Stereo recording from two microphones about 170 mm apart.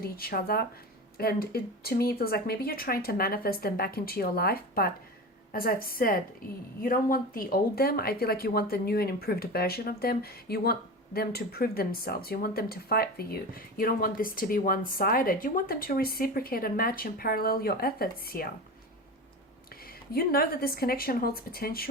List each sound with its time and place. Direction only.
0.0 s speech: 60° left (ahead or behind)
20.1 s speech: 60° left (ahead or behind)